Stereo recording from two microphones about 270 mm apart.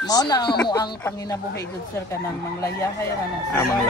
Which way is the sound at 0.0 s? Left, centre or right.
Centre.